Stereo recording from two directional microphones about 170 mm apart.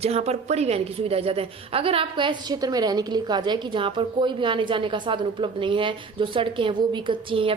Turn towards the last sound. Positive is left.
turn(degrees=-30)  # may be behind; listen again after turning